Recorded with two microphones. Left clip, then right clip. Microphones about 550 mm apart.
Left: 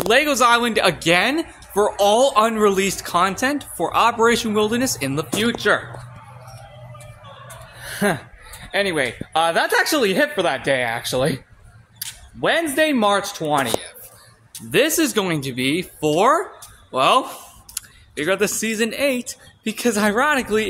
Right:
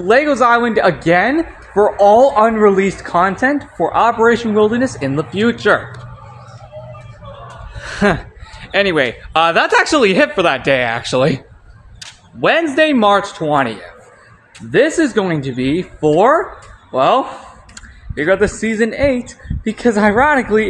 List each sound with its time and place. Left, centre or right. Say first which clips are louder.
0.1 s a woman's voice: right 5 dB; left
7.8 s a woman's voice: right 6 dB; left